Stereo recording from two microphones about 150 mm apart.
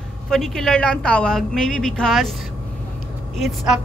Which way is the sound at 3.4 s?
Centre (ahead or behind).